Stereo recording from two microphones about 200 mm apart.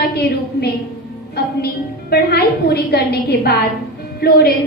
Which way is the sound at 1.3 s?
50° left (ahead or behind).